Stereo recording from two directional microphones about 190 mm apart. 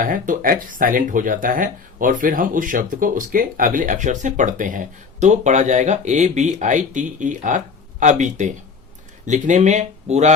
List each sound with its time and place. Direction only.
0.0 s speech: 45° right (ahead or behind)